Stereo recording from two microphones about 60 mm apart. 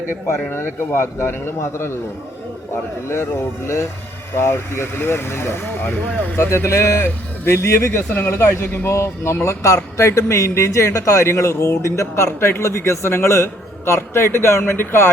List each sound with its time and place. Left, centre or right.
0.3 s speech: left
4.4 s speech: left